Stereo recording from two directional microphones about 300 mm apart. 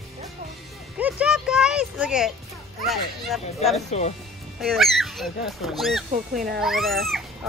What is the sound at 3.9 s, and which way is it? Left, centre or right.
Speech, left.